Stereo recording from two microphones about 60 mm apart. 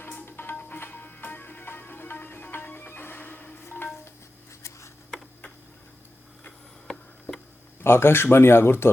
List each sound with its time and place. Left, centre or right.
0.0 s music: left
6.8 s a sound: centre
7.8 s speech: left